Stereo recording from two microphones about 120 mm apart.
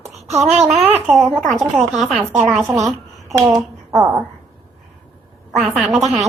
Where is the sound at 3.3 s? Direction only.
25° right (ahead or behind).